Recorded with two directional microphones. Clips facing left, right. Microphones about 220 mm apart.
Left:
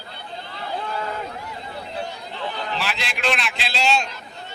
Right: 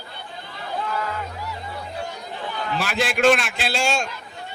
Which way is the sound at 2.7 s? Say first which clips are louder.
Right 5 dB; 50° right (ahead or behind).